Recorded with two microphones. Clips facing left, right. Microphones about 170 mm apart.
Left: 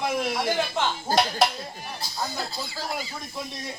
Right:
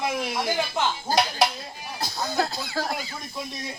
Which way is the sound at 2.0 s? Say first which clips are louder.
Right 6 dB; 60° right (ahead or behind).